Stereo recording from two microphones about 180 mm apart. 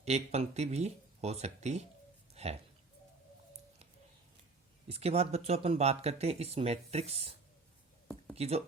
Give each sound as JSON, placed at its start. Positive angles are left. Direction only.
{"t": 0.0, "sound": "speech", "side_deg": -35}
{"t": 2.3, "sound": "a sound", "side_deg": -35}
{"t": 4.9, "sound": "speech", "side_deg": -35}
{"t": 8.4, "sound": "speech", "side_deg": -35}